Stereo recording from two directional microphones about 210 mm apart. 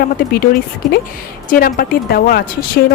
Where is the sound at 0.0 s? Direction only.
45° left (ahead or behind).